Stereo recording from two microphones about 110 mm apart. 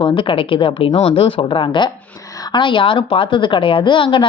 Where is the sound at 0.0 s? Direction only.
50° left (ahead or behind).